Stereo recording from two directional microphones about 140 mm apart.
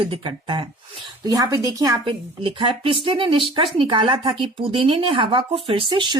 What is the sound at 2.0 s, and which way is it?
Speech, 40° right (ahead or behind).